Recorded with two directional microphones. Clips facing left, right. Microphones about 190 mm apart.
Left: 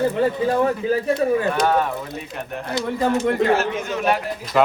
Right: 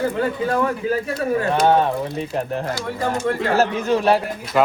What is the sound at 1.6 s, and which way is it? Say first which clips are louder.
Speech: right 3 dB; 30° right (ahead or behind).